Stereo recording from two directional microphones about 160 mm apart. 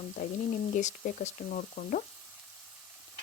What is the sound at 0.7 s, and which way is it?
Speech, 50° left (ahead or behind).